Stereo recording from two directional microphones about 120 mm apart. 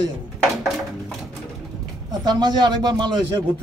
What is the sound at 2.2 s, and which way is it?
A man's voice, 35° right (ahead or behind).